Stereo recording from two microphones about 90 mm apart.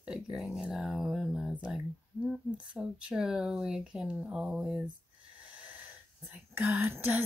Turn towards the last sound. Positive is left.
turn(degrees=-20)  # may be behind; listen again after turning